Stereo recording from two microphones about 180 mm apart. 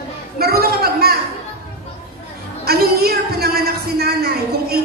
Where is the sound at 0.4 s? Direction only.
60° right (ahead or behind).